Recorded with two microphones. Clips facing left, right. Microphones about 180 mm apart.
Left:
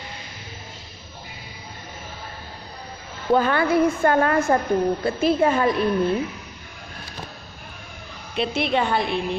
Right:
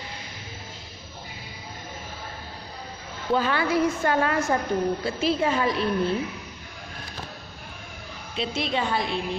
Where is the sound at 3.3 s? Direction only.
50° left (ahead or behind).